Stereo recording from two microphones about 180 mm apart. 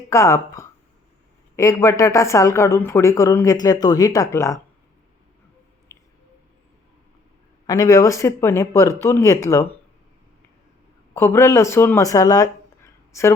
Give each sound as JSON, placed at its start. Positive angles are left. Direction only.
{"t": 0.1, "sound": "a woman's voice", "side_deg": 15}
{"t": 5.9, "sound": "squish", "side_deg": 15}
{"t": 7.7, "sound": "a woman's voice", "side_deg": 20}
{"t": 11.1, "sound": "speech", "side_deg": 15}